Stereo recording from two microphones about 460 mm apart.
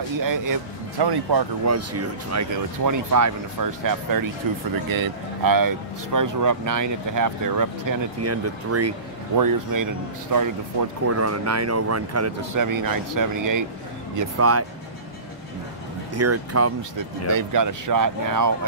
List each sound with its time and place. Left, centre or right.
0.2 s speech: right
1.7 s speech: right
9.4 s speech: right
14.1 s speech: right
16.2 s speech: right
17.3 s speech: right